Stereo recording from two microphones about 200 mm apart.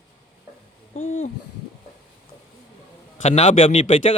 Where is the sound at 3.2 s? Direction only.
35° left (ahead or behind).